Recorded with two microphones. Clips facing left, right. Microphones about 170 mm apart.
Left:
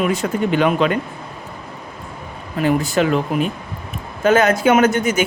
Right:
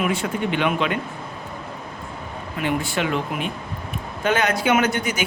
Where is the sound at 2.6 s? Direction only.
40° left (ahead or behind).